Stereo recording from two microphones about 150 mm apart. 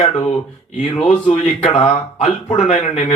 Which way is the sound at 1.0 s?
45° left (ahead or behind).